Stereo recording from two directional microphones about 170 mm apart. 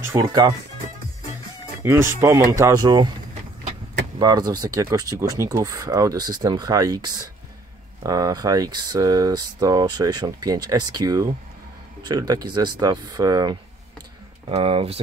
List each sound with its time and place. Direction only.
0.0 s speech: 20° right (ahead or behind)
1.8 s speech: 15° right (ahead or behind)
4.2 s speech: 25° right (ahead or behind)
14.5 s speech: 35° right (ahead or behind)